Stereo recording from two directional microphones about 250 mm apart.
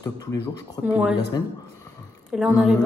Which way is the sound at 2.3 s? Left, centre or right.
Centre.